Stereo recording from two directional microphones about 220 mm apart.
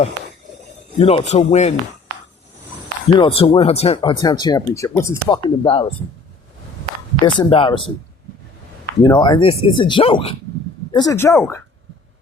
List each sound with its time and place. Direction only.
0.9 s a man's voice: 25° left (ahead or behind)
3.2 s speech: 25° left (ahead or behind)
7.3 s speech: 25° left (ahead or behind)
9.0 s speech: 20° left (ahead or behind)